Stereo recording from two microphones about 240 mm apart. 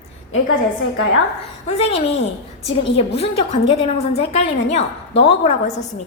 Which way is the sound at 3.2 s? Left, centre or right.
Left.